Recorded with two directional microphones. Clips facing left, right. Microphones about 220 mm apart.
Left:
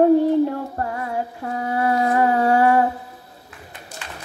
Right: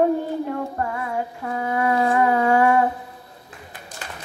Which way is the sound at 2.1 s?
35° left (ahead or behind).